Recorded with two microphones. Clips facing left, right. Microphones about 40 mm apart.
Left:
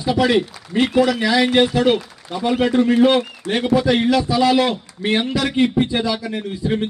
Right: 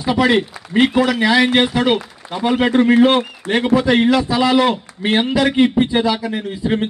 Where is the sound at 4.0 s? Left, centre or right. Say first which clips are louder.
Right 1 dB; right.